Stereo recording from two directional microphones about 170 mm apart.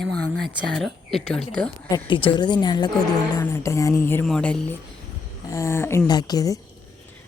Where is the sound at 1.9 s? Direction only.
30° left (ahead or behind).